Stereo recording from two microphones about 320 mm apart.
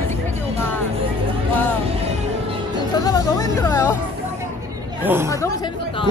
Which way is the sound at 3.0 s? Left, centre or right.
Centre.